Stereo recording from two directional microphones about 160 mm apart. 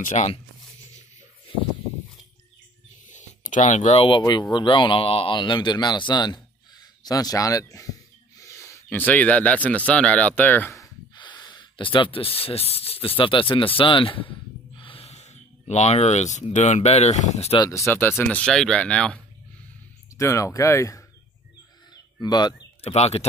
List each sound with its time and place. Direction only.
0.0 s speech: 45° left (ahead or behind)
3.1 s a sound: 50° left (ahead or behind)
4.2 s speech: 25° left (ahead or behind)
8.4 s a sound: 20° left (ahead or behind)
8.8 s speech: 10° left (ahead or behind)
11.1 s a sound: 30° left (ahead or behind)
13.2 s speech: 30° left (ahead or behind)
14.8 s a sound: 35° left (ahead or behind)
16.5 s speech: 45° left (ahead or behind)
17.6 s speech: 15° left (ahead or behind)
20.2 s speech: 20° left (ahead or behind)
22.2 s speech: 25° left (ahead or behind)
22.8 s speech: 40° left (ahead or behind)